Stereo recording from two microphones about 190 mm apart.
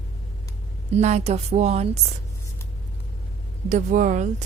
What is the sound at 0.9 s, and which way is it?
A woman's voice, 35° right (ahead or behind).